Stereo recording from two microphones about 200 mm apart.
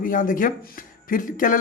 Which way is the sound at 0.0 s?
40° left (ahead or behind).